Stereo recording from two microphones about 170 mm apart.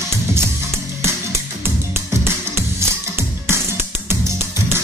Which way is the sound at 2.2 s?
15° right (ahead or behind).